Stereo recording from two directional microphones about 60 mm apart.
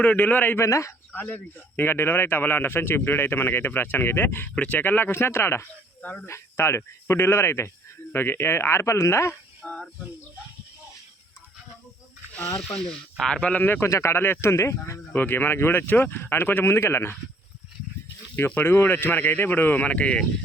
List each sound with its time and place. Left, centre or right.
0.0 s a man's voice: left
0.6 s speech: left
1.1 s a man's voice: left
4.5 s a man's voice: left
6.0 s speech: left
6.2 s speech: left
9.6 s a sound: centre
12.9 s speech: centre
13.8 s speech: left
15.1 s a man's voice: left
16.6 s speech: left
18.3 s a man's voice: left